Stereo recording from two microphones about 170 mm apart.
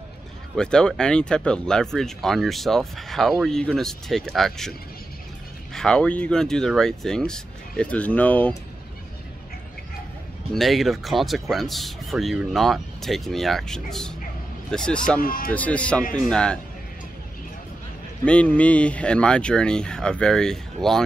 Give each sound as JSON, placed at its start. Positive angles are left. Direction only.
{"t": 0.6, "sound": "speech", "side_deg": 5}
{"t": 5.8, "sound": "speech", "side_deg": 5}
{"t": 10.5, "sound": "speech", "side_deg": 0}
{"t": 15.2, "sound": "speech", "side_deg": 60}
{"t": 15.5, "sound": "speech", "side_deg": 10}
{"t": 18.2, "sound": "speech", "side_deg": 5}